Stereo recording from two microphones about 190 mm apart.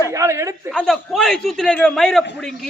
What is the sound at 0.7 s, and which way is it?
Speech, centre (ahead or behind).